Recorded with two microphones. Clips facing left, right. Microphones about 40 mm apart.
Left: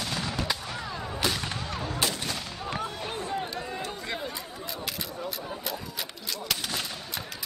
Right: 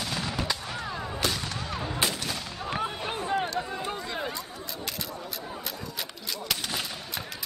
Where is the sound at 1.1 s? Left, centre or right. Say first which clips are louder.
Left 1 dB; centre.